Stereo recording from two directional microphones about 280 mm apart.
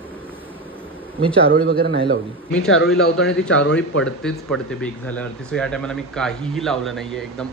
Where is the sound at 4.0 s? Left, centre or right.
Centre.